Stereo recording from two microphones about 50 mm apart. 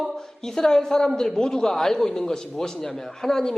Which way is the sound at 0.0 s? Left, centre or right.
Centre.